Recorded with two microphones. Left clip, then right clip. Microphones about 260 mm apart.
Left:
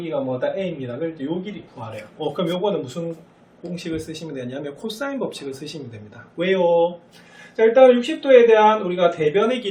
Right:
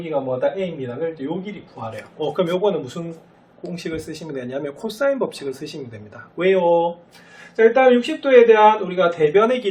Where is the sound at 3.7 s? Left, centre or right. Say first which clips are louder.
Even; centre.